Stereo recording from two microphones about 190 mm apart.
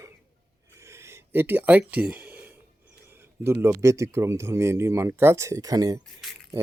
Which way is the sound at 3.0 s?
10° right (ahead or behind).